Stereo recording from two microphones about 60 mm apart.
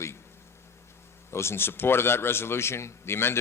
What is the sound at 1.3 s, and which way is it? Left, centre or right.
A man's voice, left.